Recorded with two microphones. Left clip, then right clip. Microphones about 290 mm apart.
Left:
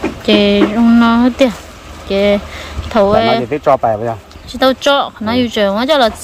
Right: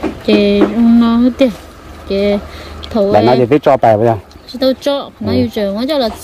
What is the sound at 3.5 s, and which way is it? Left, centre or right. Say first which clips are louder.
Speech: right 3 dB; right.